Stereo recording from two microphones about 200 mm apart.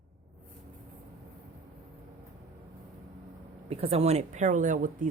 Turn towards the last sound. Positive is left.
turn(degrees=-40)  # may be behind; listen again after turning